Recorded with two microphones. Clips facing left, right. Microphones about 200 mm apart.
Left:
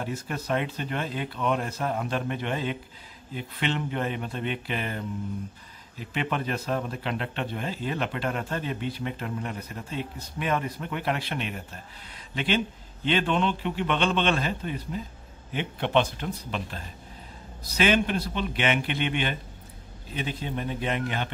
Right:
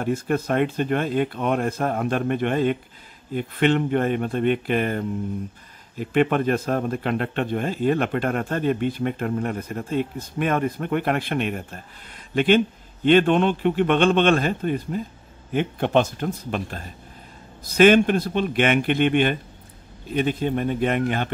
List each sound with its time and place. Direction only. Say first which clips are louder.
0.0 s a man's voice: right 9 dB; 50° right (ahead or behind)